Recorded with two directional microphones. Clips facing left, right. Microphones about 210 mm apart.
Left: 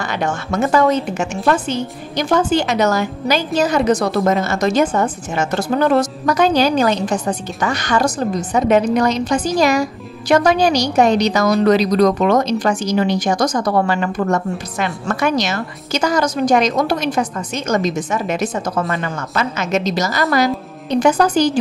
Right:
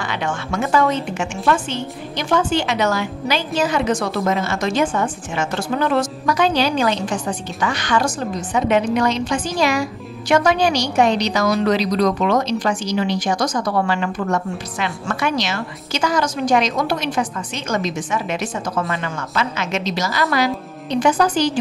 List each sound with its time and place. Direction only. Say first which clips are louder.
0.0 s a woman's voice: left 3 dB; 40° left (ahead or behind)